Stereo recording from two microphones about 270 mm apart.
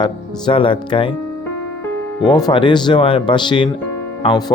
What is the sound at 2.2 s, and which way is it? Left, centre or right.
Speech, centre.